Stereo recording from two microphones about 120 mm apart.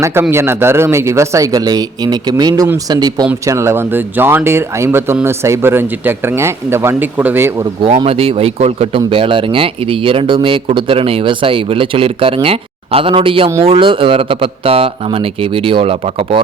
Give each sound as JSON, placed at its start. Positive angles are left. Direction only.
{"t": 0.0, "sound": "speech", "side_deg": -20}
{"t": 7.9, "sound": "speech", "side_deg": -55}
{"t": 9.0, "sound": "speech", "side_deg": -45}